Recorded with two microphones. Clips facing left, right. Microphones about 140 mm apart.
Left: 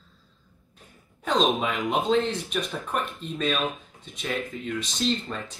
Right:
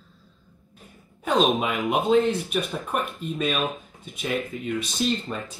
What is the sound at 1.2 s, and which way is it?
Speech, 5° right (ahead or behind).